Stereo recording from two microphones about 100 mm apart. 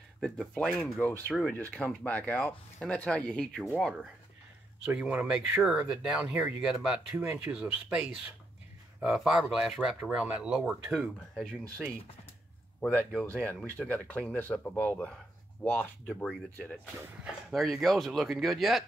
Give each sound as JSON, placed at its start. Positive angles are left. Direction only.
{"t": 0.2, "sound": "speech", "side_deg": 5}
{"t": 1.5, "sound": "speech", "side_deg": 15}
{"t": 4.8, "sound": "speech", "side_deg": -10}
{"t": 12.8, "sound": "speech", "side_deg": 5}
{"t": 17.5, "sound": "speech", "side_deg": 0}